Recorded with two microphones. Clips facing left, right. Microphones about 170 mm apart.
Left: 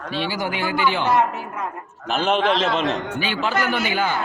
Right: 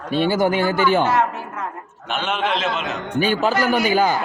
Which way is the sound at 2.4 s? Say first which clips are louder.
Left 3 dB; centre (ahead or behind).